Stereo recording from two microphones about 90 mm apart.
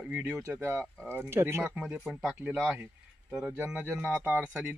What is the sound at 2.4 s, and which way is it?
Speech, 15° right (ahead or behind).